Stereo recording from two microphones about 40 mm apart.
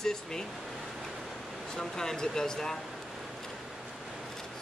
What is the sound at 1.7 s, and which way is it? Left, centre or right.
Speech, centre.